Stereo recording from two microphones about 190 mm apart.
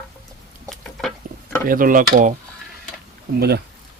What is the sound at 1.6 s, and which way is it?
Mechanisms, 45° right (ahead or behind).